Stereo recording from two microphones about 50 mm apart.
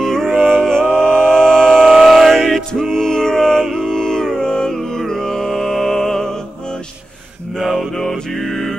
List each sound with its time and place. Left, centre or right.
0.0 s music: centre
0.8 s music: right
1.2 s music: centre
7.5 s mantra: centre
8.0 s music: centre